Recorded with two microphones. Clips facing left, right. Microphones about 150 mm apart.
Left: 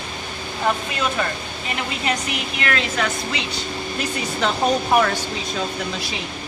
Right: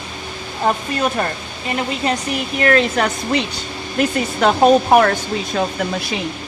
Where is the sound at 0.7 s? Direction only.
40° right (ahead or behind).